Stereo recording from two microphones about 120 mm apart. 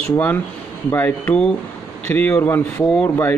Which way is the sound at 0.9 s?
20° left (ahead or behind).